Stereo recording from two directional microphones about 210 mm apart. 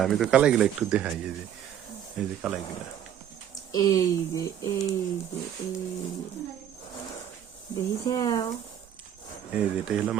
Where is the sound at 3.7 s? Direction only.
20° left (ahead or behind).